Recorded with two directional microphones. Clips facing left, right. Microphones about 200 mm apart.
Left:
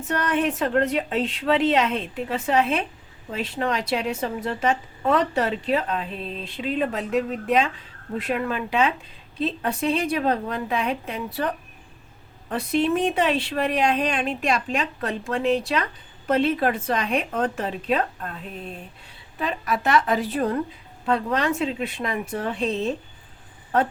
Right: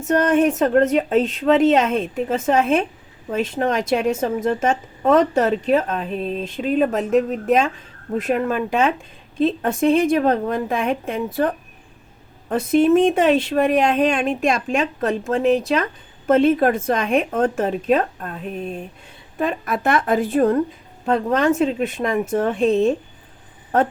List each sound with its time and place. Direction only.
0.0 s a woman's voice: 45° right (ahead or behind)
19.4 s a woman's voice: 50° right (ahead or behind)